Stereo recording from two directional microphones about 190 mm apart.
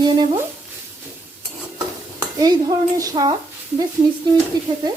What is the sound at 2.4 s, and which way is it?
Stir, 20° right (ahead or behind).